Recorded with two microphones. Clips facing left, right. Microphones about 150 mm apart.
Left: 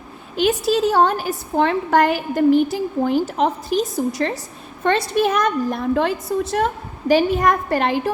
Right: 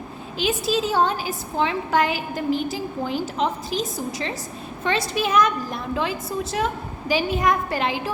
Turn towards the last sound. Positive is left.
turn(degrees=60)  # may be behind; listen again after turning